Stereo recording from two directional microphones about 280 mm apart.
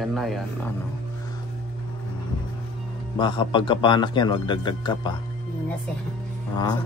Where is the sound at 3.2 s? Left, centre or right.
Centre.